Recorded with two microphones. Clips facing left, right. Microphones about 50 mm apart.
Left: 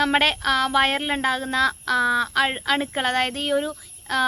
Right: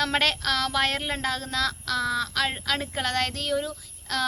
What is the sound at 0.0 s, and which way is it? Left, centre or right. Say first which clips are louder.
A woman's voice: left 5 dB; centre.